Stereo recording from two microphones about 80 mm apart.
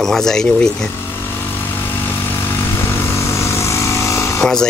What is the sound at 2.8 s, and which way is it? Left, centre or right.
Vehicle, left.